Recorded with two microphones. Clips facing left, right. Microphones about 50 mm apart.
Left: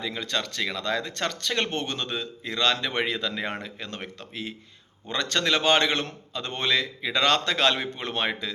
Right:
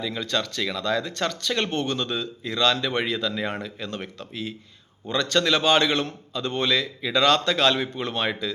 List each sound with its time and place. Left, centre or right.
0.0 s speech: left